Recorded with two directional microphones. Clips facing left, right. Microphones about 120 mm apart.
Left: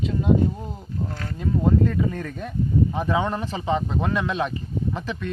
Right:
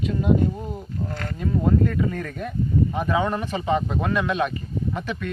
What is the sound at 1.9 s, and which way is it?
Speech, 25° left (ahead or behind).